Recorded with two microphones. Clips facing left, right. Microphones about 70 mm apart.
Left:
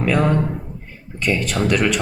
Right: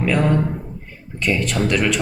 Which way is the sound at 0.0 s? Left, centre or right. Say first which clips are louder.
Even; centre.